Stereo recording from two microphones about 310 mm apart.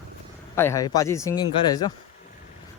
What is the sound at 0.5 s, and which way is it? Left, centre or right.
Speech, centre.